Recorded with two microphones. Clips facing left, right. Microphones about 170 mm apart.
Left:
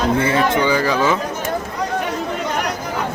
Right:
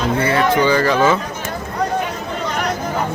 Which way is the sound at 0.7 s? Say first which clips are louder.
Right 2 dB; 10° left (ahead or behind).